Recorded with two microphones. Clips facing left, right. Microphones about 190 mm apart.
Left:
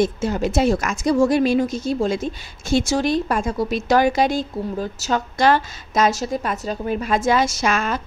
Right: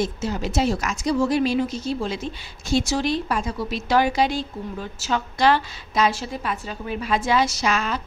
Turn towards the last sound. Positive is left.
turn(degrees=50)  # may be behind; listen again after turning